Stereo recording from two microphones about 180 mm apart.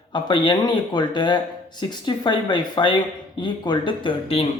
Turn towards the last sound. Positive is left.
turn(degrees=30)  # may be behind; listen again after turning